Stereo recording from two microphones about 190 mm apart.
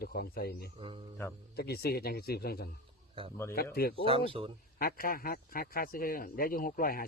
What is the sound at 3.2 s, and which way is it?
Speech, 25° right (ahead or behind).